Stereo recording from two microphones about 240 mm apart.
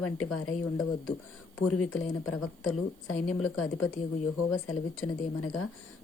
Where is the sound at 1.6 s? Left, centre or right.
Left.